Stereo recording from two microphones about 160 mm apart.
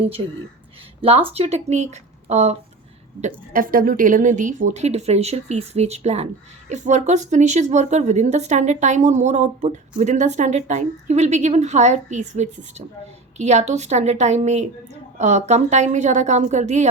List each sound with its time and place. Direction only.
1.0 s a woman's voice: 40° right (ahead or behind)